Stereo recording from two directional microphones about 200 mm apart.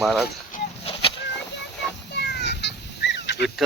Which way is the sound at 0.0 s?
Centre (ahead or behind).